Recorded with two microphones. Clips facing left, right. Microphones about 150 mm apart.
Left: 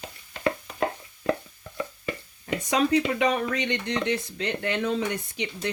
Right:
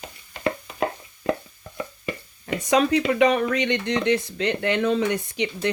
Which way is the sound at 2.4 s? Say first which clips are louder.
Right 4 dB; 85° right.